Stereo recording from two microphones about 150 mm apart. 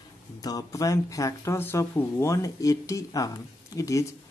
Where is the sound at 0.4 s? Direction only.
25° left (ahead or behind).